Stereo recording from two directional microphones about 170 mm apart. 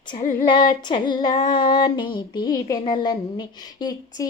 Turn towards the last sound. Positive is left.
turn(degrees=25)  # may be behind; listen again after turning